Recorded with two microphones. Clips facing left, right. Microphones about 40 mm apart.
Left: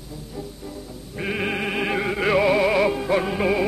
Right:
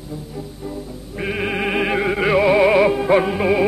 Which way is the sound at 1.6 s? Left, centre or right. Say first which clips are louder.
Right 5 dB; centre.